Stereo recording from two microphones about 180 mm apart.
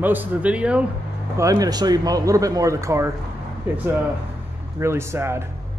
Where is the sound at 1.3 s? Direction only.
20° right (ahead or behind).